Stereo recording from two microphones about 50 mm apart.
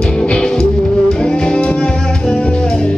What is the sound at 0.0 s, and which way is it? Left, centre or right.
Music, centre.